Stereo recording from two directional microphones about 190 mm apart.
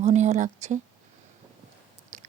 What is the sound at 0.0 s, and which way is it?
Speech, 35° right (ahead or behind).